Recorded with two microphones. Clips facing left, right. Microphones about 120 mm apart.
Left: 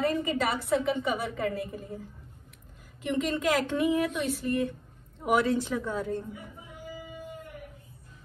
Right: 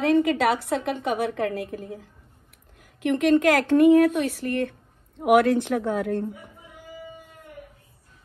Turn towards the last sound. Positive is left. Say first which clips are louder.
# right 6 dB
turn(degrees=-60)  # may be behind; listen again after turning